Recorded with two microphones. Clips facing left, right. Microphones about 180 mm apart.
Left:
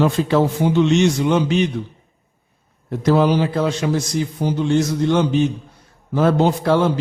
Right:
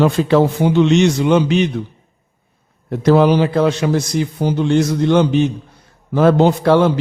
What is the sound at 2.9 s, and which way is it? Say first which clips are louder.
A man's voice: right 4 dB; 70° right (ahead or behind).